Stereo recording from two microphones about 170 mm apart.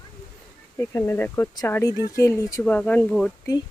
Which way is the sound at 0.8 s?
15° left (ahead or behind).